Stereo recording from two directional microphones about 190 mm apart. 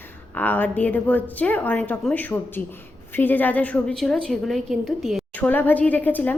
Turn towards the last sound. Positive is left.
turn(degrees=10)  # may be behind; listen again after turning